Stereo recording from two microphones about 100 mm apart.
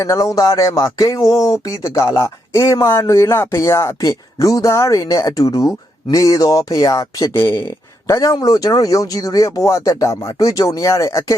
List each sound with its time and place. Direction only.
0.0 s speech: 30° left (ahead or behind)